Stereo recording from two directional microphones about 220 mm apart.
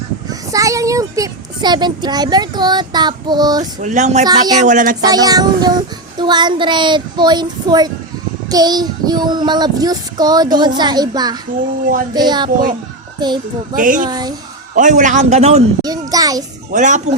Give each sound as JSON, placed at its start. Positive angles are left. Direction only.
{"t": 0.3, "sound": "speech", "side_deg": -15}
{"t": 3.8, "sound": "a man's voice", "side_deg": -35}
{"t": 4.3, "sound": "a child's voice", "side_deg": -15}
{"t": 4.6, "sound": "a man's voice", "side_deg": -35}
{"t": 5.0, "sound": "child singing", "side_deg": -15}
{"t": 13.1, "sound": "a child's voice", "side_deg": -20}
{"t": 13.7, "sound": "a man's voice", "side_deg": -35}
{"t": 14.1, "sound": "a child's voice", "side_deg": -20}
{"t": 14.8, "sound": "a man's voice", "side_deg": -35}
{"t": 15.8, "sound": "a child's voice", "side_deg": -15}
{"t": 16.7, "sound": "a man's voice", "side_deg": -35}